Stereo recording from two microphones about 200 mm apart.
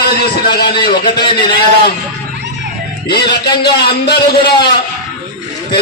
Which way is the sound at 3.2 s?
20° left (ahead or behind).